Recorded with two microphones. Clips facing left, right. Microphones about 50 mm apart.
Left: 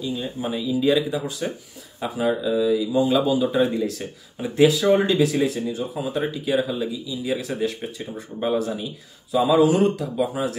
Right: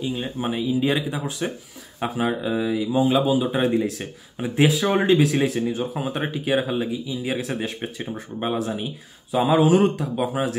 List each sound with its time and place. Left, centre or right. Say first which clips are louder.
0.0 s speech: right 1 dB; right
3.1 s speech: right 2 dB; right
3.5 s speech: even; right